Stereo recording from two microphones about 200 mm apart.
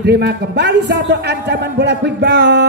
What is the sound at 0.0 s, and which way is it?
A man's voice, 55° right (ahead or behind).